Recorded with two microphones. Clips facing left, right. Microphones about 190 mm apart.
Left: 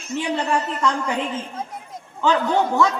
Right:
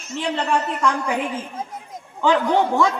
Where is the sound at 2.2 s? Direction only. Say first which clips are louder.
Right 1 dB; 15° right (ahead or behind).